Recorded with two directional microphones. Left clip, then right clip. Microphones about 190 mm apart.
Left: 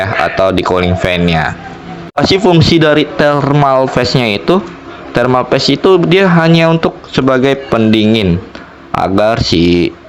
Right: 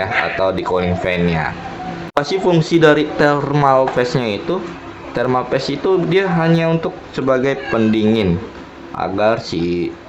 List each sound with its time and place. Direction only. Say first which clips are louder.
0.0 s speech: left 5 dB; 30° left (ahead or behind)
9.0 s speech: left 5 dB; 35° left (ahead or behind)